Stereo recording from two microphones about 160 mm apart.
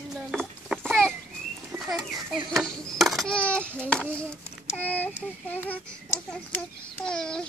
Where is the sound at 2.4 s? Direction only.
25° right (ahead or behind).